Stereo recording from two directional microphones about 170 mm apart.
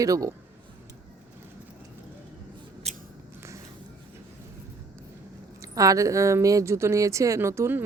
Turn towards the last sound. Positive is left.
turn(degrees=-15)  # may be behind; listen again after turning